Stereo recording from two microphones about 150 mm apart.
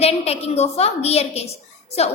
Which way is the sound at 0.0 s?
45° left (ahead or behind).